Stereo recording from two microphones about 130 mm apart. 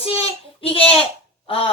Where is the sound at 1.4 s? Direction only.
45° left (ahead or behind).